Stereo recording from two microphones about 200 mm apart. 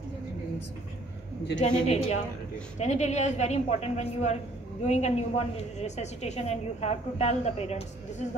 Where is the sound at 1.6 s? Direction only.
35° left (ahead or behind).